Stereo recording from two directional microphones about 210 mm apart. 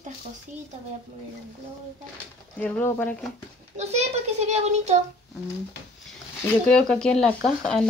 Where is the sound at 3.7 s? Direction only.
30° right (ahead or behind).